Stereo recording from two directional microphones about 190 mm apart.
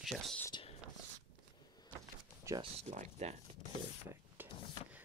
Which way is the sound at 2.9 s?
40° right (ahead or behind).